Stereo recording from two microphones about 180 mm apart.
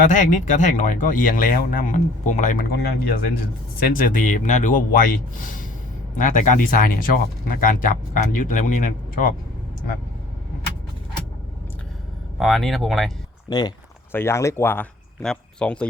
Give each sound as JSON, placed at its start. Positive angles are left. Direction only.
{"t": 0.1, "sound": "speech", "side_deg": 45}
{"t": 2.7, "sound": "speech", "side_deg": 60}
{"t": 12.4, "sound": "speech", "side_deg": 0}
{"t": 13.5, "sound": "speech", "side_deg": 20}